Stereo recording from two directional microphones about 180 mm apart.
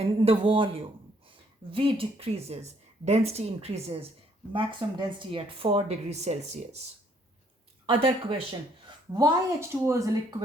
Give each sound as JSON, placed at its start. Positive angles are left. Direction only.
{"t": 0.0, "sound": "a woman's voice", "side_deg": -30}
{"t": 7.9, "sound": "speech", "side_deg": -30}
{"t": 9.1, "sound": "a woman's voice", "side_deg": -20}